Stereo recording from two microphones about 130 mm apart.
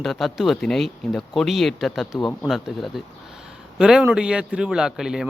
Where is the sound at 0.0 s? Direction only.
Centre (ahead or behind).